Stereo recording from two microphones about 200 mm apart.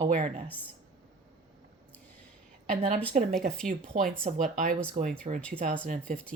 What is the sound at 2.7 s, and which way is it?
A woman's voice, 40° right (ahead or behind).